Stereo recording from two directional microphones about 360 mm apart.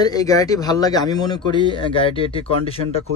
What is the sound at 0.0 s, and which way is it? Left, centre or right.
Speech, centre.